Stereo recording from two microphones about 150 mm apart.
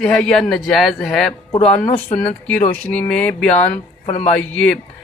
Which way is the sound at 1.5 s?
35° left (ahead or behind).